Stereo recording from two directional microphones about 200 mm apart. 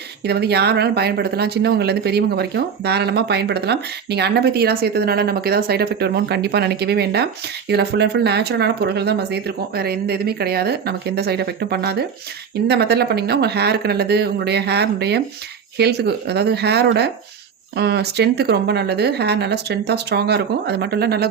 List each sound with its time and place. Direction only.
0.2 s speech: 55° right (ahead or behind)